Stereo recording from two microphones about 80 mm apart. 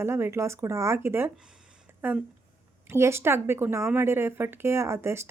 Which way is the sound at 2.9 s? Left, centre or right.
Right.